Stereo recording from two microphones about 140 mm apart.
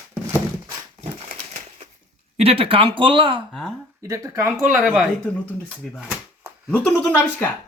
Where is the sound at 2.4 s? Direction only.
40° right (ahead or behind).